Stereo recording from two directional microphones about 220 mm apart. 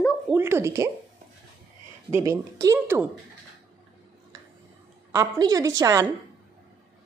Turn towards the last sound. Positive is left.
turn(degrees=-15)  # may be behind; listen again after turning